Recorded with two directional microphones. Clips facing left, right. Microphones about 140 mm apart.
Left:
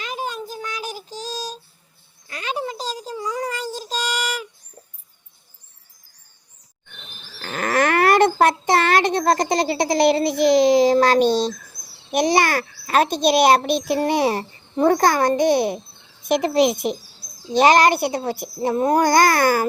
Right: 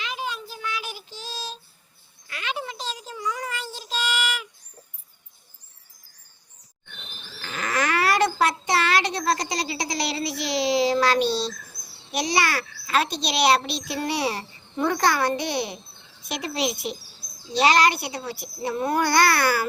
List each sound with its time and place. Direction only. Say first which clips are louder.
0.0 s child singing: left 3 dB; 45° left (ahead or behind)
2.2 s a sound: left 5 dB; 35° left (ahead or behind)
7.4 s a child's voice: left 6 dB; 50° left (ahead or behind)